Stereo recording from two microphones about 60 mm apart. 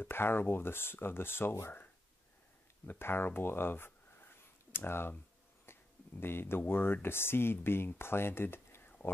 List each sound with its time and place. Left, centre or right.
0.0 s speech: left
2.9 s speech: left
5.7 s a sound: left
6.7 s speech: left